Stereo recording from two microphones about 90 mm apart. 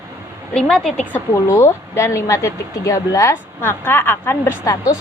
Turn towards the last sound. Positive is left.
turn(degrees=40)  # may be behind; listen again after turning